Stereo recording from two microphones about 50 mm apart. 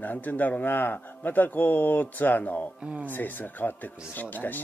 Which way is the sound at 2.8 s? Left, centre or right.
Right.